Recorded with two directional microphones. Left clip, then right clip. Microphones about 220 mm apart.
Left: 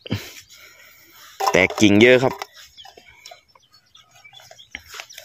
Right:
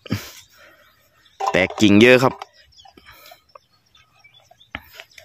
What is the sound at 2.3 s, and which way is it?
Chicken, 50° left (ahead or behind).